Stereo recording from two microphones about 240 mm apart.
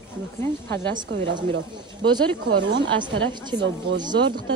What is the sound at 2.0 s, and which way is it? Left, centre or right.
Speech, right.